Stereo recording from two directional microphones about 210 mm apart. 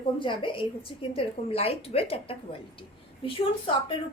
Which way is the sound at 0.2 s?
25° left (ahead or behind).